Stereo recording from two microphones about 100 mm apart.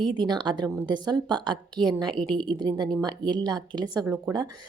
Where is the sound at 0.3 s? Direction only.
50° right (ahead or behind).